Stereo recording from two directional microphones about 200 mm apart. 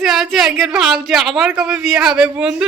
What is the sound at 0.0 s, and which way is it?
Speech, centre (ahead or behind).